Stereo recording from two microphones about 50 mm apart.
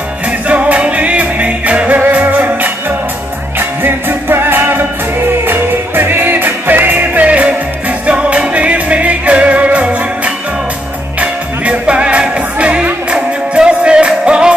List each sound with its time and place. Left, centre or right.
0.5 s music: right
3.5 s music: right; by 14.5 s centre